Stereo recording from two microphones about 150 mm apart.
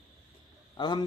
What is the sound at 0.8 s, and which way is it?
Speech, 30° left (ahead or behind).